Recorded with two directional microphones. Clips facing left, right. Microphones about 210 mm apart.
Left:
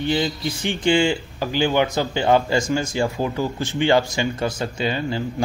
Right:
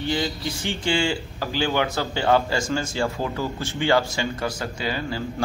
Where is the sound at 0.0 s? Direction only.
20° left (ahead or behind).